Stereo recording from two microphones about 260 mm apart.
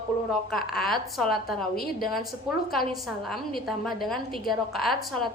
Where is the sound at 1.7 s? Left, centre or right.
Left.